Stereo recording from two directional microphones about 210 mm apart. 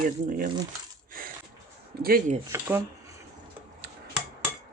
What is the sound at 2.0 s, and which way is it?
Speech, 45° right (ahead or behind).